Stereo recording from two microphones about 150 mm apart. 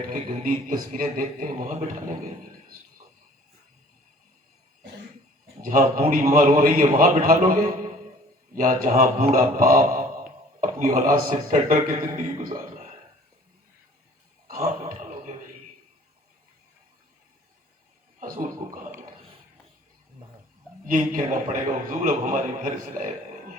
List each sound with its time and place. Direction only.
0.1 s a man's voice: 70° right (ahead or behind)
5.6 s a man's voice: 65° right (ahead or behind)
14.6 s a sound: 60° right (ahead or behind)
18.2 s chuckle: 65° right (ahead or behind)
20.8 s a man's voice: 65° right (ahead or behind)